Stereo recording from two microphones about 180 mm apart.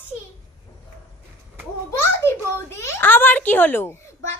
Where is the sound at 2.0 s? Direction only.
15° left (ahead or behind).